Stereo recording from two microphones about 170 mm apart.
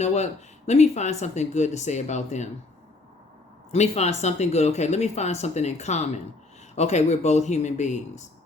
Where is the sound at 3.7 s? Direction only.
40° left (ahead or behind).